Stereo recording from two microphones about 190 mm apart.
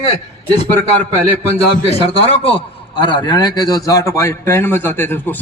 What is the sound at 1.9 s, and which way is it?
A man's voice, 30° left (ahead or behind).